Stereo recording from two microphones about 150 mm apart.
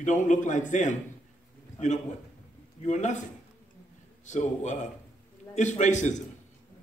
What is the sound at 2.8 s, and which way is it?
Speech, 50° left (ahead or behind).